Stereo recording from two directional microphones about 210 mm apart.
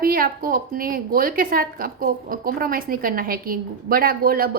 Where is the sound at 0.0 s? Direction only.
45° right (ahead or behind).